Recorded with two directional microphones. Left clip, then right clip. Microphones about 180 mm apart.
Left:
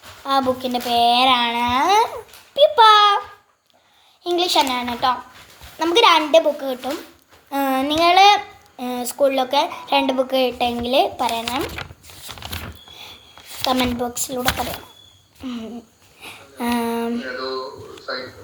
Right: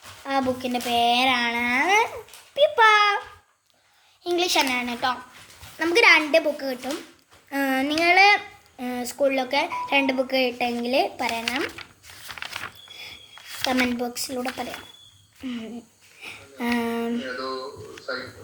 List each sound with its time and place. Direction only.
0.3 s a child's voice: centre (ahead or behind)
4.2 s a child's voice: centre (ahead or behind)
11.6 s zipper: 25° left (ahead or behind)
13.7 s a child's voice: centre (ahead or behind)
15.4 s a child's voice: 5° left (ahead or behind)